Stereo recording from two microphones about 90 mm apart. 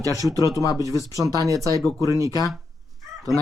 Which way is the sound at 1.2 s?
40° right (ahead or behind).